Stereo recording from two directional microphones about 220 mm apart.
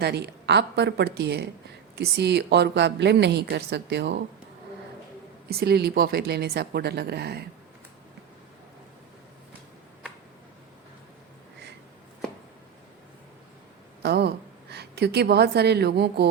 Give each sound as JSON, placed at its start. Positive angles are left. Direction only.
{"t": 0.0, "sound": "a woman's voice", "side_deg": -50}
{"t": 5.5, "sound": "a woman's voice", "side_deg": -45}
{"t": 14.0, "sound": "a woman's voice", "side_deg": -50}